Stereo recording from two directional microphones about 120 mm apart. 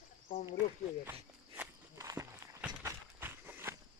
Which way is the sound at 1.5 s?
20° right (ahead or behind).